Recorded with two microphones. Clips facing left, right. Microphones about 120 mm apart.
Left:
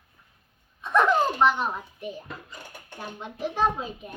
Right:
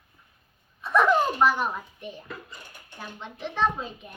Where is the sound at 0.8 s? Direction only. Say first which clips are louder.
Even; centre (ahead or behind).